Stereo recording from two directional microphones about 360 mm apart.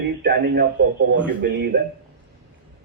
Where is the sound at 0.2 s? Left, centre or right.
Right.